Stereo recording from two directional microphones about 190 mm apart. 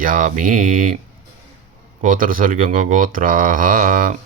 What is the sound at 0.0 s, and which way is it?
Speech, 45° right (ahead or behind).